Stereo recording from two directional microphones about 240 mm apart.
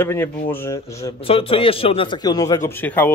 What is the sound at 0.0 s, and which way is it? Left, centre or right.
A man's voice, centre.